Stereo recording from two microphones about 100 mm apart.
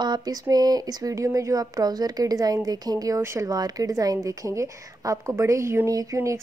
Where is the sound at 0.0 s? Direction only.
40° right (ahead or behind).